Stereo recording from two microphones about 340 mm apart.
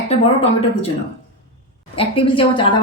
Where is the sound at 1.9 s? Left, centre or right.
Centre.